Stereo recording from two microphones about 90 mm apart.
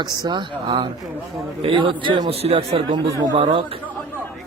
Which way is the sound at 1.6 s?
75° right (ahead or behind).